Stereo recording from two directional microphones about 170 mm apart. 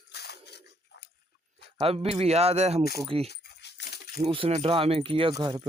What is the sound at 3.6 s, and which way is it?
Dog, 80° left.